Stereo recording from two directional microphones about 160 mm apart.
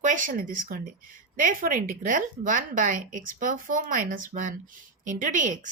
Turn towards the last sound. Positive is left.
turn(degrees=-55)  # may be behind; listen again after turning